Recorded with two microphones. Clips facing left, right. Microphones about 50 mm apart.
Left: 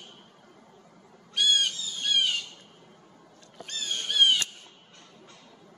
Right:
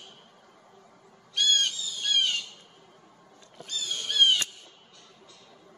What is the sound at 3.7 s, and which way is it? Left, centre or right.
Creak, left.